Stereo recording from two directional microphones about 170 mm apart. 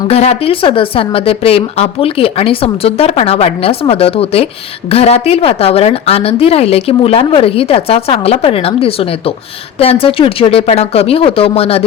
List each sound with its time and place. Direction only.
0.1 s a woman's voice: 35° left (ahead or behind)